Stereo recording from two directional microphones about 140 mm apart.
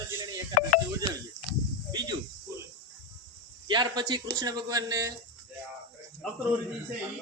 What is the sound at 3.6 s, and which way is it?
A man's voice, 35° right (ahead or behind).